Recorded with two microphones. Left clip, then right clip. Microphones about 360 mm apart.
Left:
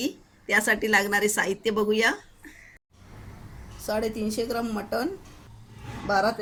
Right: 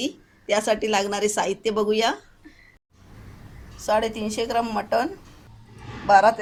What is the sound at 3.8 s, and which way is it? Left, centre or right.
Speech, right.